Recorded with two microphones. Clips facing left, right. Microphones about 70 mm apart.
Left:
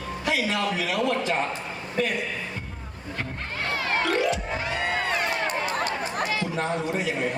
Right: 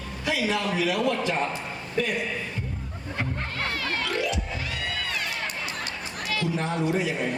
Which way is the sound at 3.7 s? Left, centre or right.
Left.